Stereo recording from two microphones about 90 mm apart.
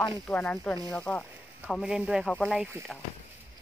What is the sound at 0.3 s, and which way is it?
Speech, 15° left (ahead or behind).